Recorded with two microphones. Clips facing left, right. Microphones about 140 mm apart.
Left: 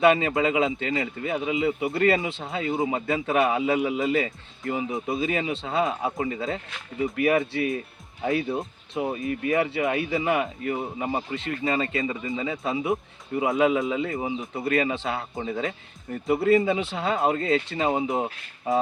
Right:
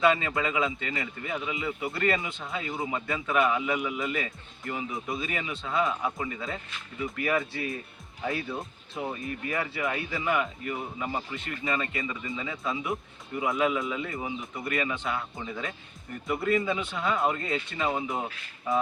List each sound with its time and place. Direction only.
0.3 s speech: 25° left (ahead or behind)
6.1 s speech: 40° left (ahead or behind)
7.0 s speech: 25° left (ahead or behind)
15.4 s speech: 50° left (ahead or behind)
16.2 s speech: 30° left (ahead or behind)